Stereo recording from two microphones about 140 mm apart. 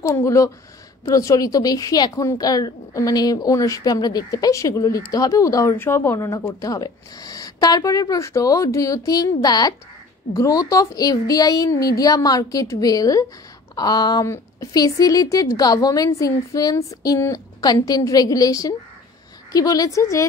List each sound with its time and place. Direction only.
0.0 s a woman's voice: 20° left (ahead or behind)